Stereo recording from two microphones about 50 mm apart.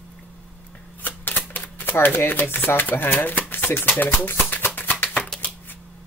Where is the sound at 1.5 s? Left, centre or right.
Left.